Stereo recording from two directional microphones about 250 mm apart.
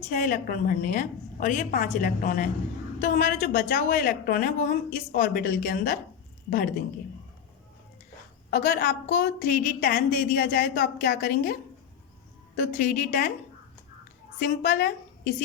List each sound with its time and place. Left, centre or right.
0.1 s a woman's voice: left
8.4 s a woman's voice: left
12.5 s a woman's voice: left
14.3 s a woman's voice: left